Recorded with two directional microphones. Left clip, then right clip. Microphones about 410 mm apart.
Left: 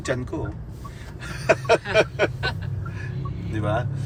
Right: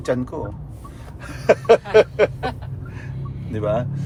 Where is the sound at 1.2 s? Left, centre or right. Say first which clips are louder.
Right 4 dB; centre.